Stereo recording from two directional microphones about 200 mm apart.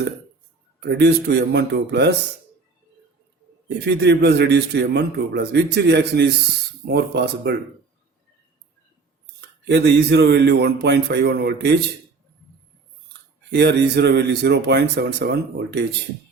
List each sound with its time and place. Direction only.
0.8 s a man's voice: 55° right (ahead or behind)
3.7 s a man's voice: 55° right (ahead or behind)
9.6 s a man's voice: 55° right (ahead or behind)
13.5 s a man's voice: 55° right (ahead or behind)